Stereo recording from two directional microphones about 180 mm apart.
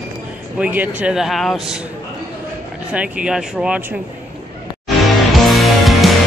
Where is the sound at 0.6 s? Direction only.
10° right (ahead or behind).